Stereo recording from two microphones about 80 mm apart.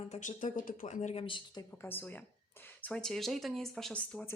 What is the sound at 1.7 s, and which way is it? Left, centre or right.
A woman's voice, left.